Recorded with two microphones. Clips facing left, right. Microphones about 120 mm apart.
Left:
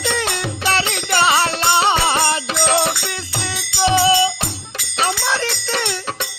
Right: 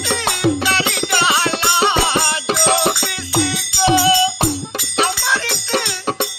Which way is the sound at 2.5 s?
30° right (ahead or behind).